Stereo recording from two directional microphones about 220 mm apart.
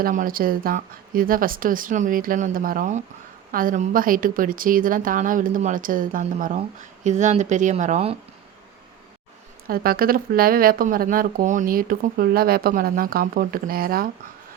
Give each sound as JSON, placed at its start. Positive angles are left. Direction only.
{"t": 0.0, "sound": "speech", "side_deg": -40}
{"t": 9.6, "sound": "speech", "side_deg": -40}